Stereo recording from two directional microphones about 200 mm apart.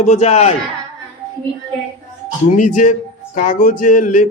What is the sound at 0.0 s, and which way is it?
Music, 35° left (ahead or behind).